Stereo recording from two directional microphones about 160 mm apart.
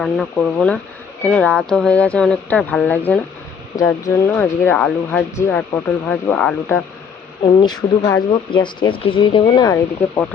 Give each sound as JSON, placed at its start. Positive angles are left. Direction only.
{"t": 0.0, "sound": "speech", "side_deg": 5}
{"t": 7.4, "sound": "speech", "side_deg": 30}